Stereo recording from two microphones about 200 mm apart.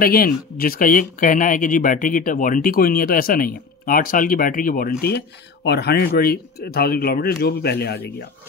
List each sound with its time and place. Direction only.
0.0 s speech: 50° left (ahead or behind)
5.0 s speech: 55° left (ahead or behind)